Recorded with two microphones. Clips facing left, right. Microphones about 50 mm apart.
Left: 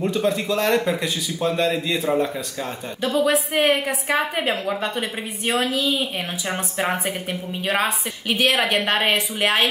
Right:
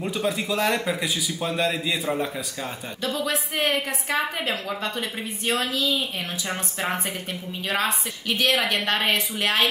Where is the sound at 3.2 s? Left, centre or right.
Left.